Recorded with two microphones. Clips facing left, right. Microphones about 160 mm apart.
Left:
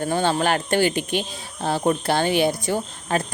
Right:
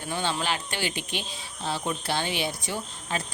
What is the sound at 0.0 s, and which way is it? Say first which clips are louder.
Speech: left 9 dB; 50° left (ahead or behind).